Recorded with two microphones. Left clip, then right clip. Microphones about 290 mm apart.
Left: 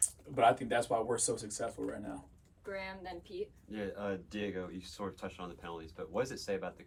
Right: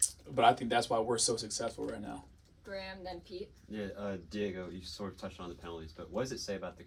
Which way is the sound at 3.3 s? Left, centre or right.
Centre.